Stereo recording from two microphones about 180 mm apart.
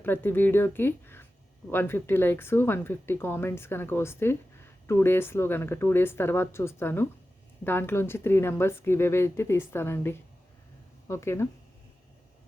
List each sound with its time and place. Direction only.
0.0 s speech: 10° left (ahead or behind)